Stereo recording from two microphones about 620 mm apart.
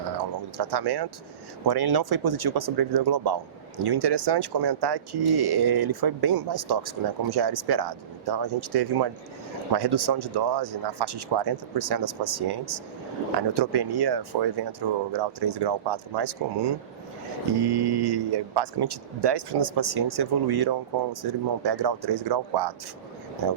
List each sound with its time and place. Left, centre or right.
0.5 s speech: right